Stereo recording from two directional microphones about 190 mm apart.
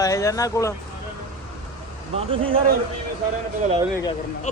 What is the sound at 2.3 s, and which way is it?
Speech, 30° right (ahead or behind).